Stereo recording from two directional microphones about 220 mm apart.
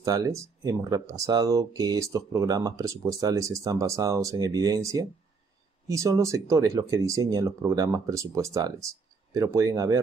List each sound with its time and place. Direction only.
0.0 s speech: 15° right (ahead or behind)